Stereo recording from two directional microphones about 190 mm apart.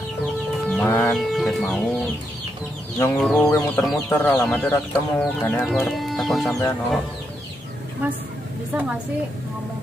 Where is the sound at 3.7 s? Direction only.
5° left (ahead or behind).